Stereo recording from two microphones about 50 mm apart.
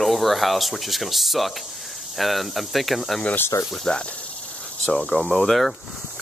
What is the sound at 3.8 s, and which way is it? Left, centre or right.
Speech, left.